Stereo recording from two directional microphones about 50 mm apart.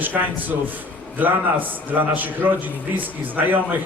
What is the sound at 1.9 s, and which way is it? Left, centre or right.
A man's voice, right.